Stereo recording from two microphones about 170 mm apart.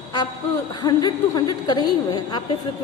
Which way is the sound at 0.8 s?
25° left (ahead or behind).